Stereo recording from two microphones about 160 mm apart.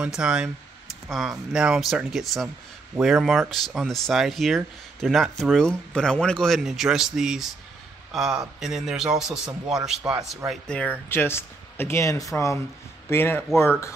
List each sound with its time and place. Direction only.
0.0 s speech: 5° right (ahead or behind)
10.4 s speech: 5° left (ahead or behind)
11.1 s speech: 15° left (ahead or behind)